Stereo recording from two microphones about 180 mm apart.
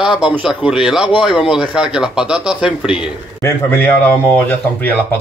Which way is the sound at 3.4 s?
10° left (ahead or behind).